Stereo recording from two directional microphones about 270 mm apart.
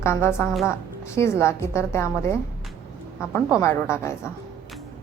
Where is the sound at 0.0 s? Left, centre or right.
Centre.